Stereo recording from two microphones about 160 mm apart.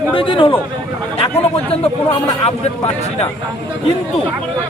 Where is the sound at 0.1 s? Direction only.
35° left (ahead or behind).